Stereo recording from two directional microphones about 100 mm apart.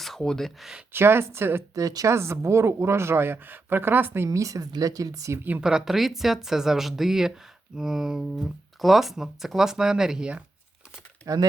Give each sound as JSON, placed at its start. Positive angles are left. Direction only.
{"t": 0.0, "sound": "speech", "side_deg": 5}
{"t": 0.9, "sound": "speech", "side_deg": -25}
{"t": 1.7, "sound": "speech", "side_deg": -35}
{"t": 4.3, "sound": "speech", "side_deg": -35}
{"t": 5.4, "sound": "speech", "side_deg": -15}
{"t": 11.3, "sound": "speech", "side_deg": -35}